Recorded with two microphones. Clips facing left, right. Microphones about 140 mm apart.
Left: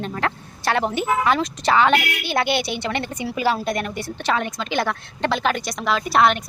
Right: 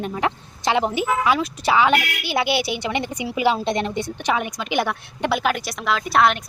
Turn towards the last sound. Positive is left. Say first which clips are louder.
# left 1 dB
turn(degrees=0)  # may be behind; listen again after turning